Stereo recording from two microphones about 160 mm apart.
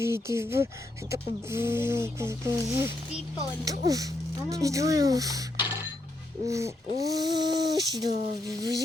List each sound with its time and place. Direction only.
0.0 s speech: 15° right (ahead or behind)